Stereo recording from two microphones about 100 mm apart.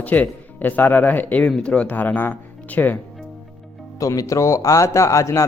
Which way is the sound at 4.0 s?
35° left (ahead or behind).